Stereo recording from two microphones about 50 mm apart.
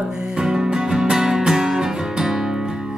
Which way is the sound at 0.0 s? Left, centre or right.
Centre.